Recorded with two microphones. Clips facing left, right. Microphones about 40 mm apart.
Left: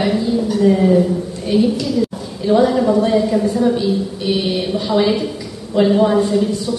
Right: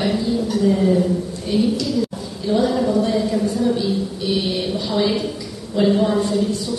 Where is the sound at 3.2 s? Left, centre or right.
Centre.